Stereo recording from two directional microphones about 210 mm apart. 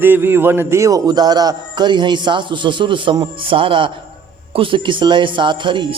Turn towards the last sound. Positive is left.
turn(degrees=-20)  # may be behind; listen again after turning